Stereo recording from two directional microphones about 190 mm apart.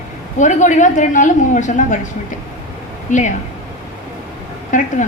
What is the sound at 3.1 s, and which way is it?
Speech, 40° left (ahead or behind).